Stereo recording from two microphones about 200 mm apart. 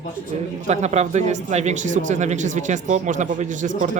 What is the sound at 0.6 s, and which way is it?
A man's voice, 35° right (ahead or behind).